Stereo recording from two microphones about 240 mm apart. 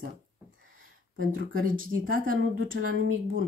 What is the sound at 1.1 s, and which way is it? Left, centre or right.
Speech, right.